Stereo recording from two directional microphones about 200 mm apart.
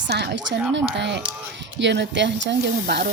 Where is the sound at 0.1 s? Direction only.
55° right (ahead or behind).